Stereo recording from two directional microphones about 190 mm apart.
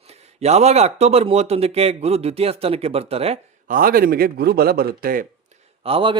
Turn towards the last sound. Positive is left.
turn(degrees=-30)  # may be behind; listen again after turning